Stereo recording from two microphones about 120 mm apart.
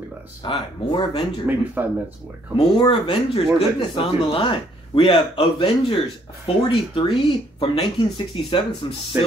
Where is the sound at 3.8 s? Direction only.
50° left (ahead or behind).